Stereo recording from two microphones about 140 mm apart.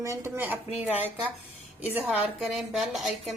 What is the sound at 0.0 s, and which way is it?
Speech, 20° right (ahead or behind).